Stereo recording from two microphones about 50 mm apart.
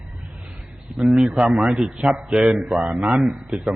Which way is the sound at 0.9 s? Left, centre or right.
Centre.